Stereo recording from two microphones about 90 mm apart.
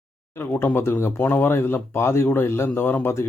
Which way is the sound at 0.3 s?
25° left (ahead or behind).